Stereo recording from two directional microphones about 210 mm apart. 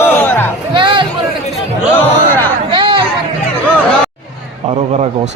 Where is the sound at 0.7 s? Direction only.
20° right (ahead or behind).